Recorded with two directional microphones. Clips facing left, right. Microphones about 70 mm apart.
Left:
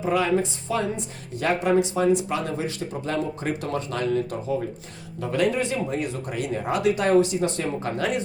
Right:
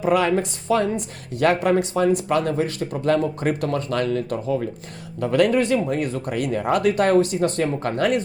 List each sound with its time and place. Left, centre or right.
0.0 s speech: right